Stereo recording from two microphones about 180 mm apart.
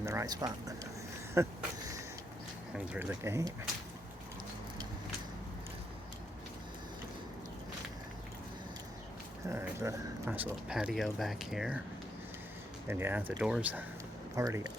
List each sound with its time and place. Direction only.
0.0 s speech: 15° right (ahead or behind)
2.7 s speech: 5° right (ahead or behind)
9.5 s speech: 15° right (ahead or behind)
12.9 s speech: 10° right (ahead or behind)
14.3 s speech: 20° right (ahead or behind)